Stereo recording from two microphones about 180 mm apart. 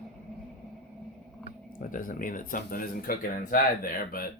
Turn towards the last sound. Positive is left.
turn(degrees=50)  # may be behind; listen again after turning